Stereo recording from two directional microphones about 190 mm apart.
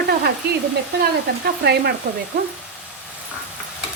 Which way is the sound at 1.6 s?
60° right (ahead or behind).